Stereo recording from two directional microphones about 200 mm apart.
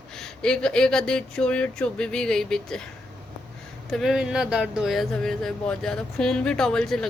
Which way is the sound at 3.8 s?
Centre (ahead or behind).